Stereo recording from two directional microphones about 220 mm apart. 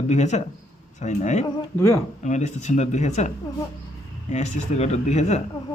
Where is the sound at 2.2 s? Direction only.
30° left (ahead or behind).